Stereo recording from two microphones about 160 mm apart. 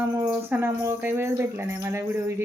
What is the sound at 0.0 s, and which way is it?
Speech, 10° right (ahead or behind).